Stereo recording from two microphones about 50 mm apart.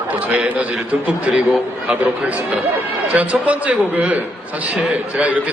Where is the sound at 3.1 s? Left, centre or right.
Right.